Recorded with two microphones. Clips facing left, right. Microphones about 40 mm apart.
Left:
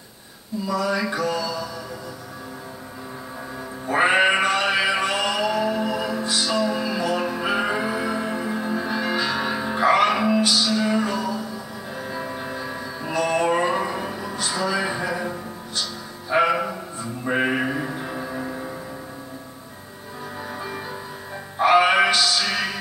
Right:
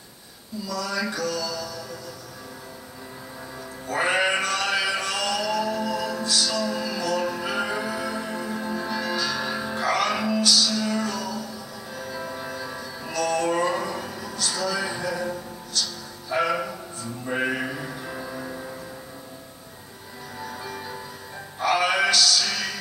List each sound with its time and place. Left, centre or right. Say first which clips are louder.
0.7 s mantra: left 5 dB; left
3.8 s music: left 5 dB; left
21.5 s music: left 6 dB; left